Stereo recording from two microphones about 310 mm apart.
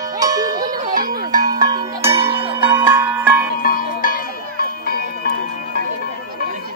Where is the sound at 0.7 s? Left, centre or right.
Right.